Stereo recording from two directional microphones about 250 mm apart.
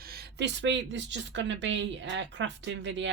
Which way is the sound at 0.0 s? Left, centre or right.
Right.